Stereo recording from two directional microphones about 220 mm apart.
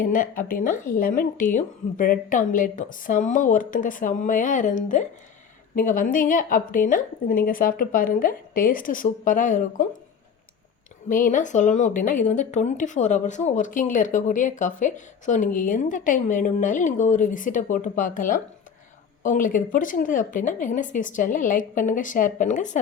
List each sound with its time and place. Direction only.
0.0 s speech: 40° left (ahead or behind)
11.1 s speech: 35° left (ahead or behind)